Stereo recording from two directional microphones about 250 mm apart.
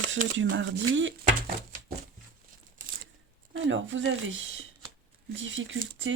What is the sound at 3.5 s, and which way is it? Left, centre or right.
Speech, right.